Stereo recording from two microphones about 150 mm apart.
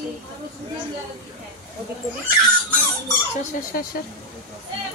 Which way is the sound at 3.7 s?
80° left.